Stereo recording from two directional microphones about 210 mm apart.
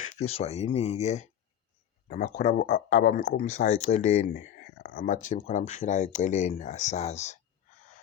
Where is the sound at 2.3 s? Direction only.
35° left (ahead or behind).